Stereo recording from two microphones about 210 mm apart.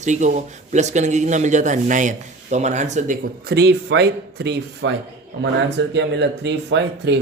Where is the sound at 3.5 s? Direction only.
55° right (ahead or behind).